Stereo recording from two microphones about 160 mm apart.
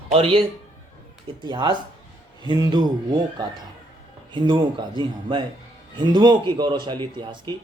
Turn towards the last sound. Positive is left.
turn(degrees=-30)  # may be behind; listen again after turning